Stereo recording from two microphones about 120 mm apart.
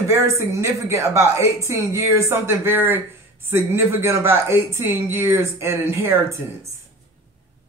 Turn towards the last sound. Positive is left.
turn(degrees=-20)  # may be behind; listen again after turning